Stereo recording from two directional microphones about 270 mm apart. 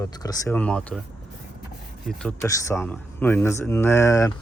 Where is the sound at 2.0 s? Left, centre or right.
Centre.